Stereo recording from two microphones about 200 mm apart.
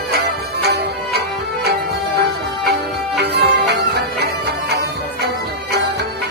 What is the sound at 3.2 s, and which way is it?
Music, 55° right (ahead or behind).